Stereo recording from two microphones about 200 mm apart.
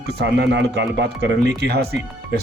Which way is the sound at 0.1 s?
55° right (ahead or behind).